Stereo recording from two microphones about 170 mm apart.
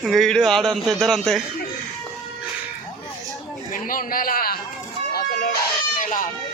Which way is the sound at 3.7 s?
55° left (ahead or behind).